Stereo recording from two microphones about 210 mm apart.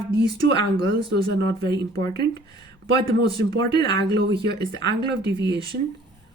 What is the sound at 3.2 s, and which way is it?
Speech, 50° right (ahead or behind).